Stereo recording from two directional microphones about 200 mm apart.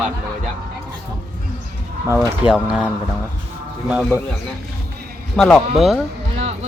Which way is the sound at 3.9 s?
5° right (ahead or behind).